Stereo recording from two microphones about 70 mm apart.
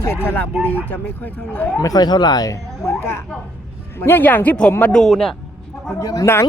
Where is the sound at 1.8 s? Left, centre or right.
Left.